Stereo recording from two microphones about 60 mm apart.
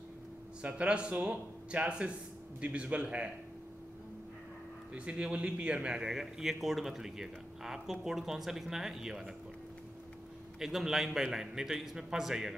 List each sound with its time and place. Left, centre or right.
0.6 s a man's voice: centre
4.9 s a man's voice: centre
10.6 s a man's voice: centre